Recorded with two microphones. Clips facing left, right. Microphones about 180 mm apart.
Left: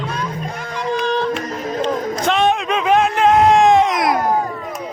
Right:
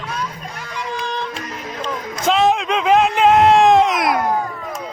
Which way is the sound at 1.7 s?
40° left (ahead or behind).